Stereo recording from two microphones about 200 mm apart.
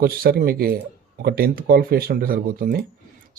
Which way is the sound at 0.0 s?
45° right (ahead or behind).